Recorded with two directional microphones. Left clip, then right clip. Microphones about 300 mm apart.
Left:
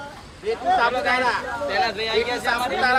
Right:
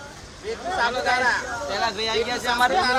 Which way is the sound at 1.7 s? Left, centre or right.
Centre.